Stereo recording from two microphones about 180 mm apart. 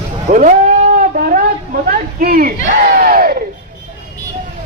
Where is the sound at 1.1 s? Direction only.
50° right (ahead or behind).